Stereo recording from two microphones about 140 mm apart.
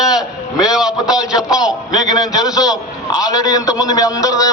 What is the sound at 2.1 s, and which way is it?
A man's voice, 25° left (ahead or behind).